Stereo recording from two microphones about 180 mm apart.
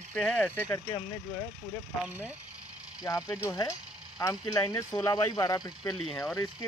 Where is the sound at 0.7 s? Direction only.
25° left (ahead or behind).